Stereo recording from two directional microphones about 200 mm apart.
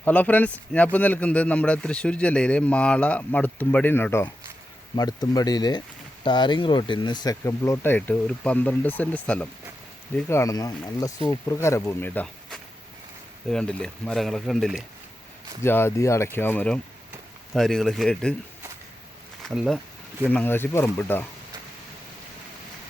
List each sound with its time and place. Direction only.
0.0 s speech: 10° left (ahead or behind)
15.6 s speech: 10° left (ahead or behind)
19.4 s speech: centre (ahead or behind)